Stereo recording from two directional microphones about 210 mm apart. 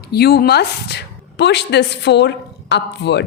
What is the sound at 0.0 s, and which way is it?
A woman's voice, 50° left (ahead or behind).